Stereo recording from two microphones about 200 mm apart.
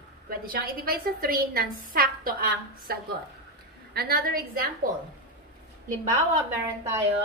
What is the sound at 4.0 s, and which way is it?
Speech, 50° right (ahead or behind).